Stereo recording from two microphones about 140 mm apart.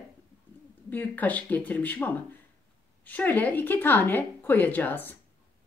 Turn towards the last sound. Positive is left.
turn(degrees=15)  # may be behind; listen again after turning